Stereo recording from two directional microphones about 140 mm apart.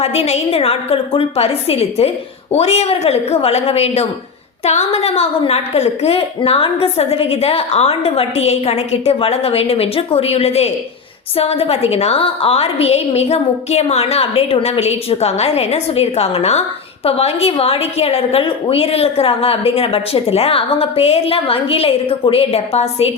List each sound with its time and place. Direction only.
0.0 s a woman's voice: 50° left (ahead or behind)